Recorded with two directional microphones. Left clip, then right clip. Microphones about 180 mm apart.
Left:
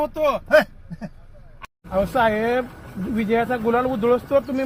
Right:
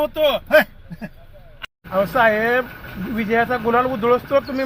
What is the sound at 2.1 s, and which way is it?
Speech, 35° left (ahead or behind).